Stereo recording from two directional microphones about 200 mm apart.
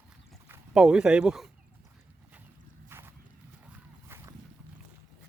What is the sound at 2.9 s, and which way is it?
Horse, 10° right (ahead or behind).